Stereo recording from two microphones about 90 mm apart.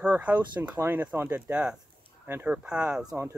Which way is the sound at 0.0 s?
20° right (ahead or behind).